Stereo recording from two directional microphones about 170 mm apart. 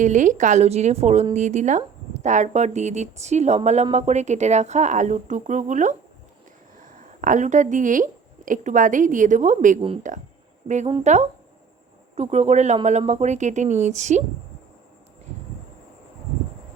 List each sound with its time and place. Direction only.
0.0 s speech: 45° right (ahead or behind)